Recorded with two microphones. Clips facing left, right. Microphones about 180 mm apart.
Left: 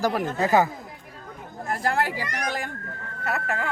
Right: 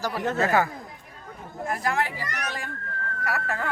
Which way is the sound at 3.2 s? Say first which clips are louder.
Left 2 dB; 20° left (ahead or behind).